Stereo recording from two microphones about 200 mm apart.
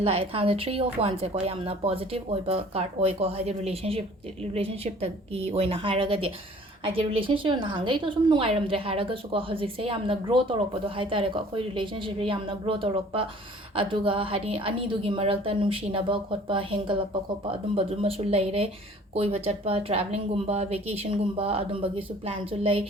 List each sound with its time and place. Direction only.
0.0 s speech: 30° right (ahead or behind)